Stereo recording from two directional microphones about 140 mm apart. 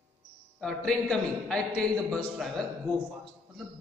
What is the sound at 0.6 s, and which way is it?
A man's voice, 5° left (ahead or behind).